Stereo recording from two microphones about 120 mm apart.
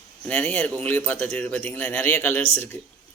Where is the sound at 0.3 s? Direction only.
10° left (ahead or behind).